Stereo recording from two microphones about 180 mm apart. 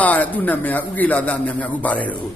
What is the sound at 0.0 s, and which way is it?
A man's voice, 10° left (ahead or behind).